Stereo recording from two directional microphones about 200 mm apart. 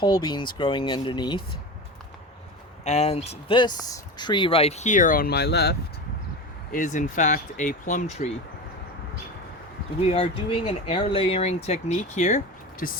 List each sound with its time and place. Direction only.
0.0 s speech: 20° left (ahead or behind)
2.8 s speech: 35° left (ahead or behind); by 5.7 s 55° left (ahead or behind)
6.7 s speech: 40° left (ahead or behind)
10.0 s speech: 30° left (ahead or behind)
12.8 s speech: 45° left (ahead or behind)